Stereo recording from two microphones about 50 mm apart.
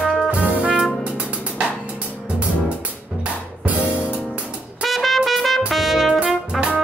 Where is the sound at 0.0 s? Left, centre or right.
Centre.